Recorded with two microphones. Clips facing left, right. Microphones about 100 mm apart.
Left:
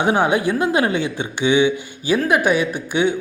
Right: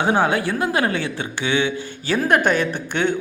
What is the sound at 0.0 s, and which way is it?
Speech, 15° left (ahead or behind).